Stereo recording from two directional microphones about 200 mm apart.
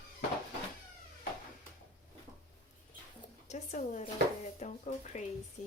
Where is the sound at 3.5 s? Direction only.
35° left (ahead or behind).